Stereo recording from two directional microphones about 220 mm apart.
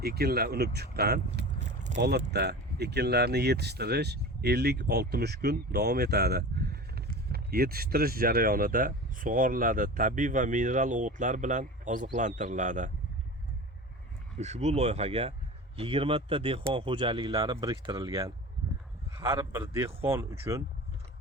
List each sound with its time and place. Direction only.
0.0 s speech: 45° right (ahead or behind)
2.0 s speech: 45° right (ahead or behind)
14.3 s speech: 30° right (ahead or behind)
19.3 s speech: 10° right (ahead or behind)